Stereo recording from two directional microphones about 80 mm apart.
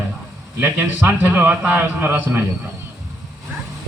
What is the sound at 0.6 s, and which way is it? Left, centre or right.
A man's voice, right.